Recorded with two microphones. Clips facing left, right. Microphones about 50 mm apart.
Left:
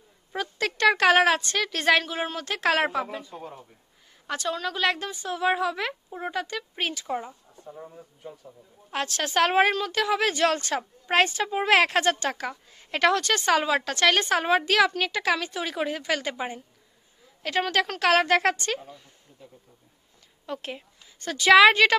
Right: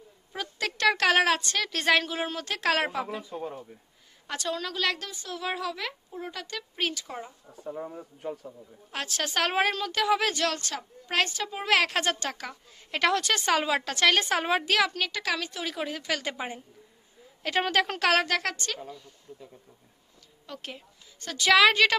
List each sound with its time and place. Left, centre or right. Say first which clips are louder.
0.3 s a woman's voice: left 4 dB; centre; by 6.4 s left
6.9 s a woman's voice: left 6 dB; centre
7.6 s speech: right 6 dB; right
8.9 s a woman's voice: left 4 dB; centre
10.4 s a woman's voice: left 6 dB; left
16.3 s a woman's voice: left 3 dB; centre
18.3 s a woman's voice: left 7 dB; left
20.4 s a woman's voice: left 6 dB; centre